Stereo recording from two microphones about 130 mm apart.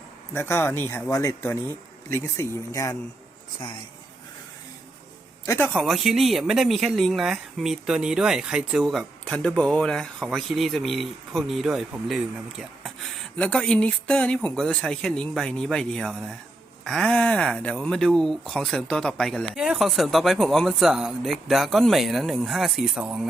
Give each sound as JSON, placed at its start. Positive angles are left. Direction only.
{"t": 0.3, "sound": "speech", "side_deg": 20}
{"t": 5.5, "sound": "a man's voice", "side_deg": 15}
{"t": 5.7, "sound": "speech", "side_deg": 0}
{"t": 13.3, "sound": "speech", "side_deg": 10}